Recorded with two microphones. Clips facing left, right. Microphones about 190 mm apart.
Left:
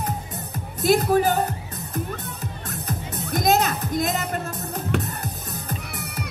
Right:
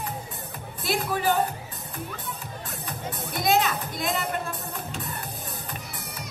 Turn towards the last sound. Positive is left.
turn(degrees=65)  # may be behind; listen again after turning